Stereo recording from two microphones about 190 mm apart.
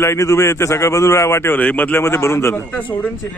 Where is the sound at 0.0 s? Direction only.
15° left (ahead or behind).